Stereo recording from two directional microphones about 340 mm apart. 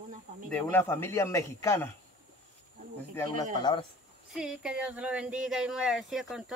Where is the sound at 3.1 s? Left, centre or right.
Centre.